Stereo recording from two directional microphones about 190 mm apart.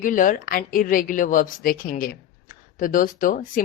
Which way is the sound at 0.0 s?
45° left (ahead or behind).